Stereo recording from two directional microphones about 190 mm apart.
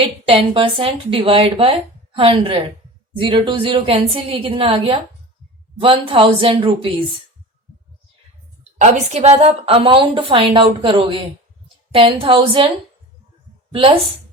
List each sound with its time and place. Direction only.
0.3 s a woman's voice: 30° right (ahead or behind)
8.8 s a woman's voice: 35° right (ahead or behind)